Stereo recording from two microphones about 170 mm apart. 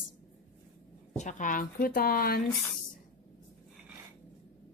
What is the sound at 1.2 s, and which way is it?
Speech, 45° left (ahead or behind).